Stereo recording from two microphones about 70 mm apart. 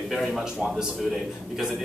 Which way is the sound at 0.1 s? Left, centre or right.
Centre.